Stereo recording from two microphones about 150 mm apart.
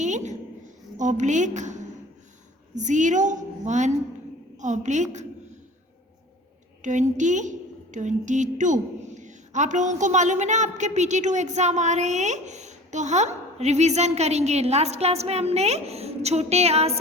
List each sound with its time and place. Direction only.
0.0 s a sound: 50° right (ahead or behind)
0.9 s a woman's voice: 55° right (ahead or behind)
6.8 s a woman's voice: 55° right (ahead or behind)